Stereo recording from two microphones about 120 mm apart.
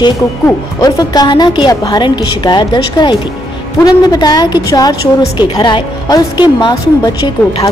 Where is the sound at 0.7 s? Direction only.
35° left (ahead or behind).